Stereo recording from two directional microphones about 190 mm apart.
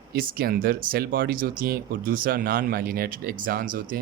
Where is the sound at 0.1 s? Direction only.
50° right (ahead or behind).